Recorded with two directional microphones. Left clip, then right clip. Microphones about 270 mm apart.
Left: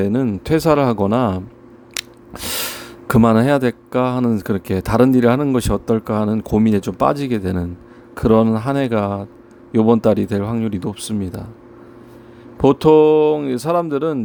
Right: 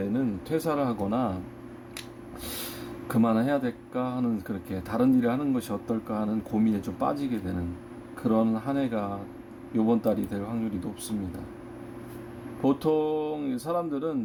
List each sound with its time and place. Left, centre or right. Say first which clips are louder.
0.0 s speech: left 11 dB; left
1.9 s drip: left 15 dB; left
3.1 s speech: left 12 dB; left
12.6 s speech: left 14 dB; left